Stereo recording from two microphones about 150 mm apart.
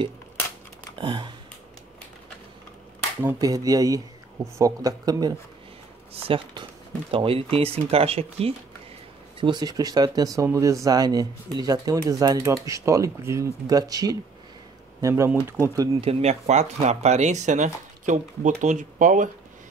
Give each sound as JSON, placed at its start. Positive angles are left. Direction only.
{"t": 0.9, "sound": "a sound", "side_deg": -35}
{"t": 3.3, "sound": "speech", "side_deg": -25}
{"t": 6.2, "sound": "speech", "side_deg": -35}
{"t": 9.4, "sound": "speech", "side_deg": -30}
{"t": 16.0, "sound": "speech", "side_deg": -45}